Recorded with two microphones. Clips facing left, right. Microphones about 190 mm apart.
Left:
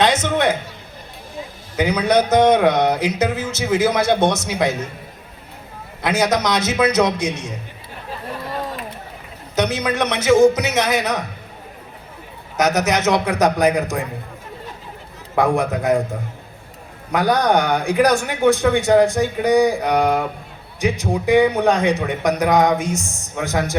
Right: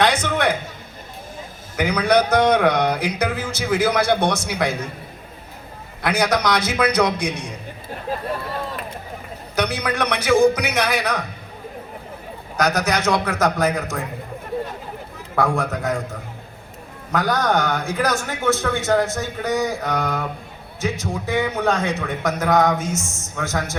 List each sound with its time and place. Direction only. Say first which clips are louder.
0.0 s a sound: left 2 dB; 25° left (ahead or behind)
1.7 s speech: left 1 dB; 20° left (ahead or behind)
6.0 s speech: left 2 dB; 20° left (ahead or behind)
9.6 s speech: left 3 dB; 25° left (ahead or behind)
12.5 s speech: left 3 dB; 20° left (ahead or behind)
15.4 s a man's voice: left 3 dB; 15° left (ahead or behind)
17.1 s a man's voice: left 4 dB; 15° left (ahead or behind)